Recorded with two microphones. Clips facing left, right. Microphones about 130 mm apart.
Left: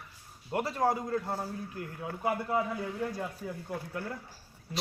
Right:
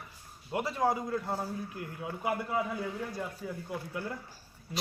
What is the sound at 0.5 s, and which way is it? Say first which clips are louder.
A man's voice: left 1 dB; 5° right (ahead or behind).